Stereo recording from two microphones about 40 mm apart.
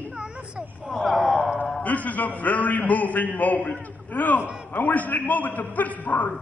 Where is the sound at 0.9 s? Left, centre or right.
Centre.